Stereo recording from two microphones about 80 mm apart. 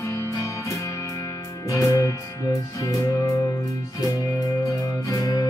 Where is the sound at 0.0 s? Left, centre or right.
Left.